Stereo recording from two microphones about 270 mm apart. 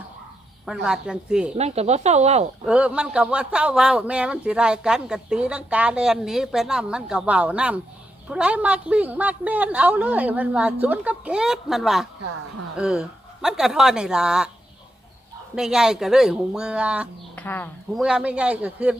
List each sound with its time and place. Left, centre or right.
0.6 s a man's voice: centre
1.5 s speech: right
2.6 s a man's voice: centre
15.5 s a man's voice: centre
17.4 s speech: centre
18.0 s a man's voice: centre